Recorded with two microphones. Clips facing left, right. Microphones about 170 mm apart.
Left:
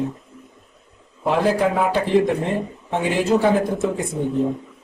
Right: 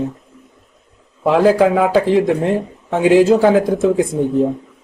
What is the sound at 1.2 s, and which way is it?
Speech, 90° right.